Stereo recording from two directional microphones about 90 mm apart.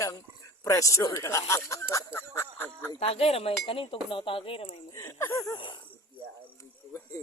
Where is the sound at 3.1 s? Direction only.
90° left.